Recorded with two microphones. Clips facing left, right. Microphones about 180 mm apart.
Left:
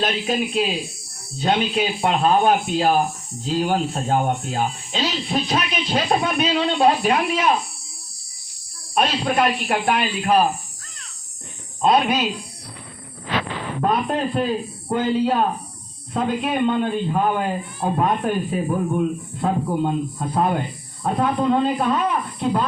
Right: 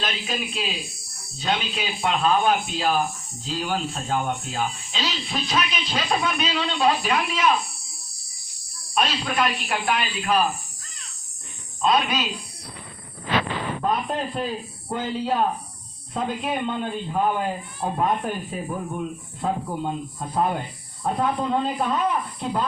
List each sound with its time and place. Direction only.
0.0 s speech: 50° left (ahead or behind)
9.0 s speech: 55° left (ahead or behind)
11.8 s speech: 55° left (ahead or behind)
13.8 s a man's voice: 70° left (ahead or behind)